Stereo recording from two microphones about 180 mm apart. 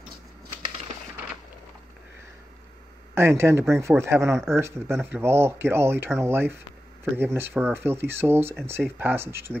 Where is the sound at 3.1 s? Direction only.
15° right (ahead or behind).